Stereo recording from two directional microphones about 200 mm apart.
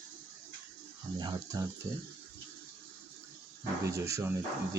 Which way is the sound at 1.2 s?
20° right (ahead or behind).